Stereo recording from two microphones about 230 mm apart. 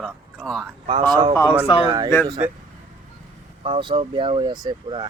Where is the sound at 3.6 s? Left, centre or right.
Right.